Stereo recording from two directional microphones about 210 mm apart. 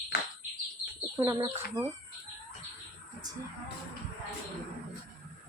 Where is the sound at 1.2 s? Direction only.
15° right (ahead or behind).